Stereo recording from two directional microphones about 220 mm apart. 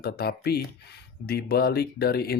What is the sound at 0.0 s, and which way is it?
Speech, 45° left (ahead or behind).